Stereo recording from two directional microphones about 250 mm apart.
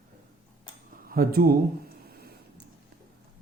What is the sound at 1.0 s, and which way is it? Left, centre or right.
Speech, right.